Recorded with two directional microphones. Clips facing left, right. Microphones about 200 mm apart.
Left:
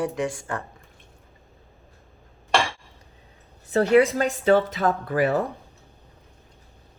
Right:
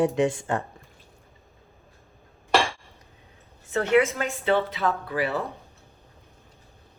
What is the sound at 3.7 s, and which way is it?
A woman's voice, 35° left (ahead or behind).